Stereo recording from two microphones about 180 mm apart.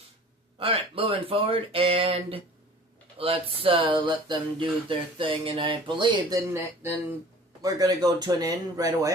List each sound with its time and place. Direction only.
0.6 s speech: 30° right (ahead or behind)
7.6 s speech: 20° right (ahead or behind)